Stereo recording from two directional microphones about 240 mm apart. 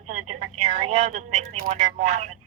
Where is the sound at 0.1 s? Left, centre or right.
Right.